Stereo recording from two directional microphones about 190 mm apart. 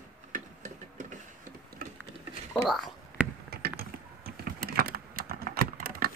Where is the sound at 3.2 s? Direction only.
5° right (ahead or behind).